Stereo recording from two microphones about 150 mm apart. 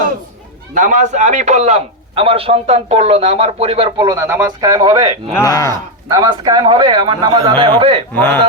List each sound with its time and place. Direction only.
0.7 s a man's voice: 60° right (ahead or behind); by 5.1 s 30° right (ahead or behind)
5.4 s speech: 25° left (ahead or behind)
6.1 s a man's voice: 25° right (ahead or behind)
8.1 s a man's voice: 15° left (ahead or behind)